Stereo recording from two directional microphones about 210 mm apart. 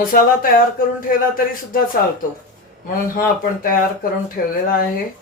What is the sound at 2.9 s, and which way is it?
Speech, 40° left (ahead or behind).